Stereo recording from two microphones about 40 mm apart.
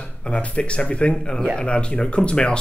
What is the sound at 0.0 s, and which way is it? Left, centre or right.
Speech, left.